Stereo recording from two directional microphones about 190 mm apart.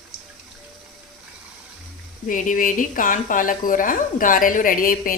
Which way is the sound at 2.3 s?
45° left (ahead or behind).